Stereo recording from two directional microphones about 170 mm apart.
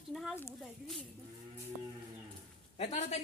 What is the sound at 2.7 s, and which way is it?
Speech, 40° left (ahead or behind).